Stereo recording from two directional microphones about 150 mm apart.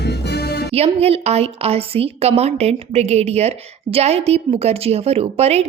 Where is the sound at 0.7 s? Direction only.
45° right (ahead or behind).